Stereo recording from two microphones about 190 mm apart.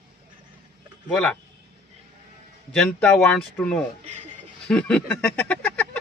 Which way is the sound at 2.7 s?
5° left (ahead or behind).